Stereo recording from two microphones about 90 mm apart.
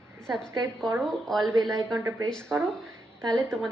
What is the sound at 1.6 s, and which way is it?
Speech, 40° right (ahead or behind).